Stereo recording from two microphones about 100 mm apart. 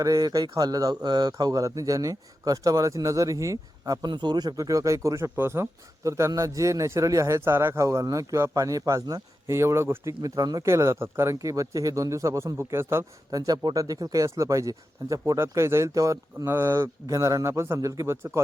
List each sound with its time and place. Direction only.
0.0 s speech: 35° right (ahead or behind)
10.2 s speech: 40° right (ahead or behind)
13.3 s speech: 35° right (ahead or behind)